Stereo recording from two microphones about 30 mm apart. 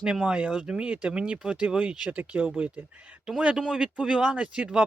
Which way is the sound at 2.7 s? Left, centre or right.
Right.